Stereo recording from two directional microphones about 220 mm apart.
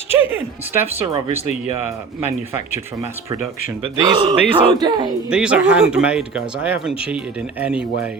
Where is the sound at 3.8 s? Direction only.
20° right (ahead or behind).